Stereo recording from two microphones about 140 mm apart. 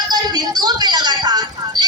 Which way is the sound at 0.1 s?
30° right (ahead or behind).